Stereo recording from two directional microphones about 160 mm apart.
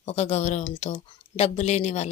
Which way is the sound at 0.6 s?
35° left (ahead or behind).